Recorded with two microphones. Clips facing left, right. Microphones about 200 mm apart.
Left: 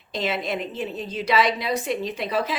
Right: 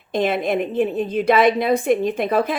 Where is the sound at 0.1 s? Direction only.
55° right (ahead or behind).